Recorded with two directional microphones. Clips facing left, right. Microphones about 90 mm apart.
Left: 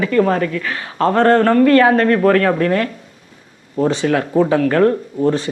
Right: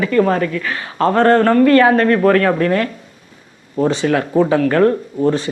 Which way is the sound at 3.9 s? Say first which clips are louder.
Even; 20° right (ahead or behind).